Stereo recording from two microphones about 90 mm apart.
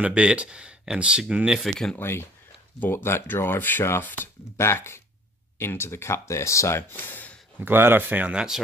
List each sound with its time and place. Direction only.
0.0 s speech: 15° right (ahead or behind); by 2.0 s 5° left (ahead or behind)
2.0 s speech: 30° left (ahead or behind)
7.6 s speech: 25° right (ahead or behind)